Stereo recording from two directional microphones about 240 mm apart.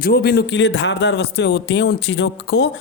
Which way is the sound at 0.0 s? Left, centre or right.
Left.